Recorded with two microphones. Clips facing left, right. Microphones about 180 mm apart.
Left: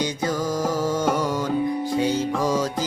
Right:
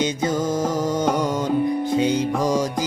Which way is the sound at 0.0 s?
20° right (ahead or behind).